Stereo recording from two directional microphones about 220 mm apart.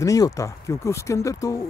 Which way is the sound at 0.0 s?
15° left (ahead or behind).